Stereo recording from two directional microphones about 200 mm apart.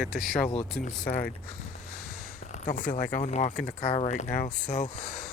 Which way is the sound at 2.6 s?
40° left (ahead or behind).